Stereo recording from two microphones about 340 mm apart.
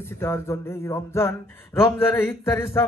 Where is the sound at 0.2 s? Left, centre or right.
Centre.